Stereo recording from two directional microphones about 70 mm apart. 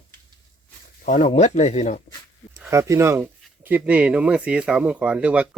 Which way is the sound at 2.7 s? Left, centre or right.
Right.